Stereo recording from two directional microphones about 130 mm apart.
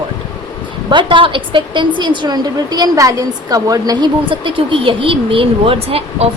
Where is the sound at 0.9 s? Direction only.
40° right (ahead or behind).